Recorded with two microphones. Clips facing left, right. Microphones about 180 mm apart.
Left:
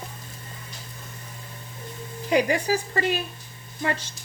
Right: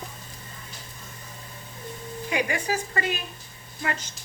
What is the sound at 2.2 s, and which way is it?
Speech, 35° left (ahead or behind).